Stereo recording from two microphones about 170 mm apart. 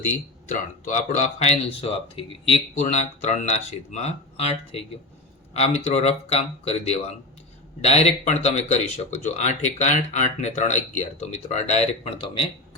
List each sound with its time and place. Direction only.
0.0 s speech: 45° left (ahead or behind)
2.8 s speech: 40° left (ahead or behind)